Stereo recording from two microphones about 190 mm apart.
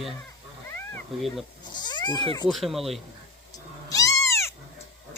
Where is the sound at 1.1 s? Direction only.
Centre (ahead or behind).